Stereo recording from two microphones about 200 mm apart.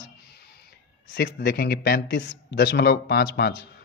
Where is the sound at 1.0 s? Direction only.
55° left (ahead or behind).